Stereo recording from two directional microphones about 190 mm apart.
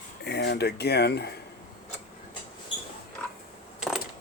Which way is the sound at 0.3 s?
60° left (ahead or behind).